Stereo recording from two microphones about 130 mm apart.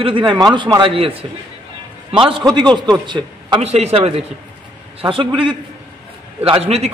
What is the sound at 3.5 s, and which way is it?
A man's voice, 55° right (ahead or behind).